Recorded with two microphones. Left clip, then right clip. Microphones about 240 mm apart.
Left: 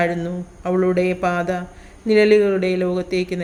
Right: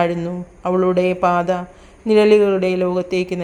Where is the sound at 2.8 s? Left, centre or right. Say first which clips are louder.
Right 3 dB; right.